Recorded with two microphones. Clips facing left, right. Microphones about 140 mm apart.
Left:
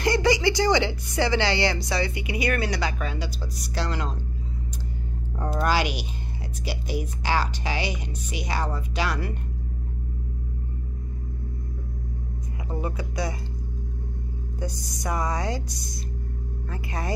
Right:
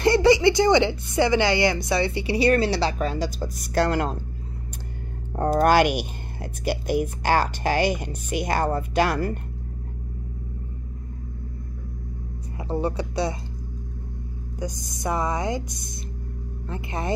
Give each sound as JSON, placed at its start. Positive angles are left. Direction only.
{"t": 0.0, "sound": "speech", "side_deg": -25}
{"t": 5.3, "sound": "a woman's voice", "side_deg": -50}
{"t": 12.6, "sound": "speech", "side_deg": -30}
{"t": 14.6, "sound": "speech", "side_deg": -20}
{"t": 16.6, "sound": "speech", "side_deg": -25}